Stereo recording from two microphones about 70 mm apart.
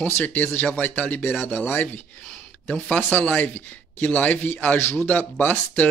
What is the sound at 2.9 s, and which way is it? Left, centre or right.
Speech, left.